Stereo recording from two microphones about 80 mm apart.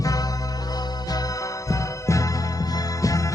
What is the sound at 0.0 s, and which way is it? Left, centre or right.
Music, left.